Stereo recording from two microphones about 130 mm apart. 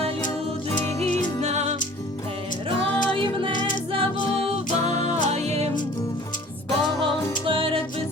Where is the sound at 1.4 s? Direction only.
60° right (ahead or behind).